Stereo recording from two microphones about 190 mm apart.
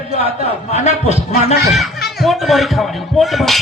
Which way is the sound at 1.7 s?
Centre (ahead or behind).